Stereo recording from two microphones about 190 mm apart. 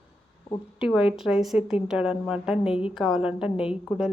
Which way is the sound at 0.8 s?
5° right (ahead or behind).